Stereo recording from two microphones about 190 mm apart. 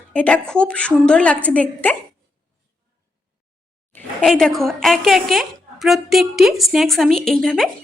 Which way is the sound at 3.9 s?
5° left (ahead or behind).